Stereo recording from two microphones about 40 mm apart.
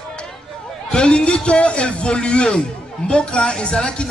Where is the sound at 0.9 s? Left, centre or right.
Left.